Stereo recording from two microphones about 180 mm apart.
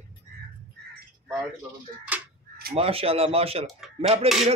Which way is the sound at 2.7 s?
35° right (ahead or behind).